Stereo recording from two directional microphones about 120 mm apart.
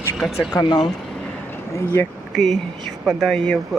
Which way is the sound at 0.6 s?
35° left (ahead or behind).